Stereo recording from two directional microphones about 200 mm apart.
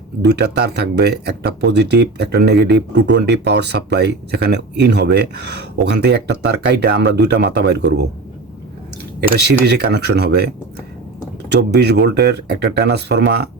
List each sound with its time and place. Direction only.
0.3 s speech: 55° right (ahead or behind)
9.4 s speech: 55° right (ahead or behind)